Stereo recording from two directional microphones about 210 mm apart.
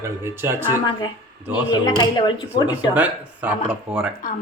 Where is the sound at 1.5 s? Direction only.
20° left (ahead or behind).